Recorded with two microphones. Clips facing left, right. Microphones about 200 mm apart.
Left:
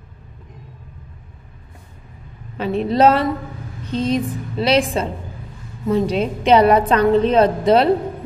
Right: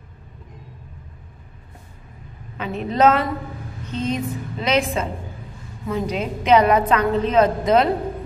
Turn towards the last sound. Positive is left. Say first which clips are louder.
# left 3 dB
turn(degrees=30)  # may be behind; listen again after turning